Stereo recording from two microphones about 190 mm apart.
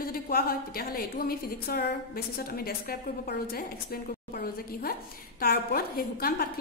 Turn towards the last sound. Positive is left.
turn(degrees=55)  # may be behind; listen again after turning